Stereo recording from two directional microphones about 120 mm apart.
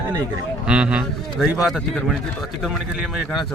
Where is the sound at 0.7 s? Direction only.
10° right (ahead or behind).